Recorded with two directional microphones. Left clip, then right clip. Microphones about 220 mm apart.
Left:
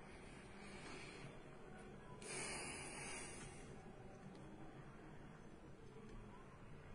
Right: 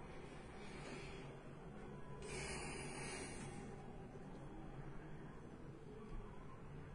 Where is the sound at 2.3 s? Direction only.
20° left (ahead or behind).